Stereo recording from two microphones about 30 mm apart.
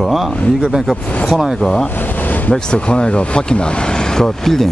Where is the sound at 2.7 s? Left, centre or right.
Left; by 4.7 s centre.